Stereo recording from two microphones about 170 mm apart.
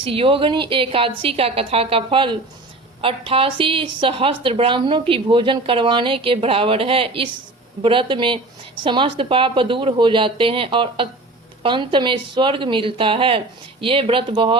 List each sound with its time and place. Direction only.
0.0 s a woman's voice: 30° right (ahead or behind)